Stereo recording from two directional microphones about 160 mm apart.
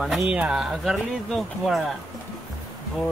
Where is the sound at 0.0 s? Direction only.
5° right (ahead or behind).